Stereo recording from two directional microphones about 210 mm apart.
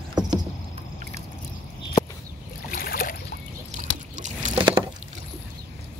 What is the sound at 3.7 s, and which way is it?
Boat, 35° right (ahead or behind).